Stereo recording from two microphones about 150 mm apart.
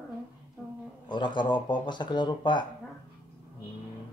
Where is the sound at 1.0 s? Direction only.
30° left (ahead or behind).